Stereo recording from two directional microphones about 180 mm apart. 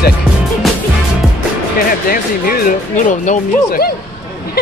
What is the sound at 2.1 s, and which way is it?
Speech, 50° left (ahead or behind).